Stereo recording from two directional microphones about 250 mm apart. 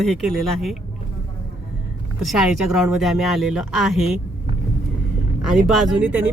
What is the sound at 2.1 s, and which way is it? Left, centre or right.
Speech, centre.